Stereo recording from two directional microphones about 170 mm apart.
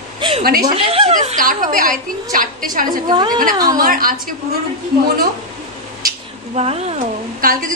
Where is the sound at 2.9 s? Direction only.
25° right (ahead or behind).